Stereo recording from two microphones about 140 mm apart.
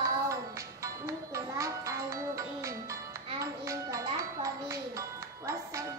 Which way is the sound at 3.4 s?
25° right (ahead or behind).